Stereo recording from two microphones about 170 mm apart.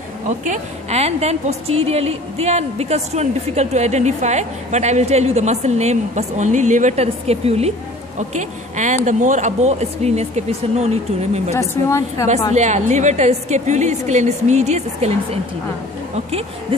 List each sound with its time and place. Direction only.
0.3 s a woman's voice: 40° right (ahead or behind)
11.7 s a woman's voice: 15° left (ahead or behind)
12.5 s a woman's voice: 45° right (ahead or behind)